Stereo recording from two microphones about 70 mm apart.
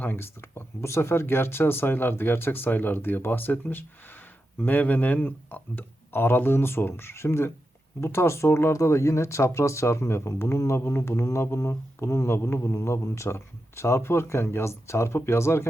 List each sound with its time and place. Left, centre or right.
0.0 s speech: left